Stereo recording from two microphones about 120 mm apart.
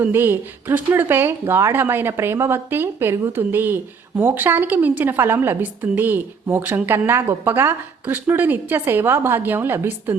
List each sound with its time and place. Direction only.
0.0 s a woman's voice: 15° right (ahead or behind)